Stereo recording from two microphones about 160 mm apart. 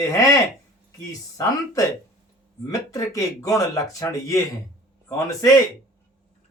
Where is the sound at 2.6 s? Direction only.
20° left (ahead or behind).